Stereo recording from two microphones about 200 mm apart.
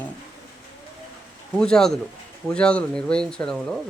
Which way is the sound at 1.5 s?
5° left (ahead or behind).